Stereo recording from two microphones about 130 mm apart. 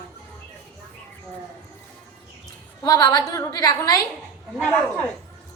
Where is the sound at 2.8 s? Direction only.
25° left (ahead or behind).